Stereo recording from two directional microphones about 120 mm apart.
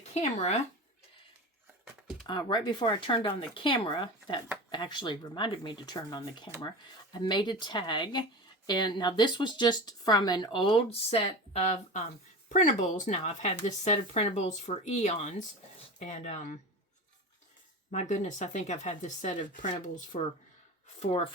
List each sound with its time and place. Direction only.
0.1 s speech: 75° left (ahead or behind)
2.2 s speech: 40° left (ahead or behind); by 16.6 s 80° left
17.9 s speech: 85° left
20.1 s speech: 80° left
21.0 s speech: 50° left (ahead or behind)